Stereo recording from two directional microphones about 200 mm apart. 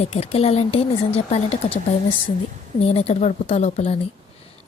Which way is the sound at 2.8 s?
30° left (ahead or behind).